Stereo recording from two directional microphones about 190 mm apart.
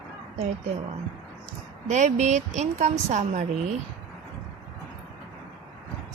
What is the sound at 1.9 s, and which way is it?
A woman's voice, 40° right (ahead or behind).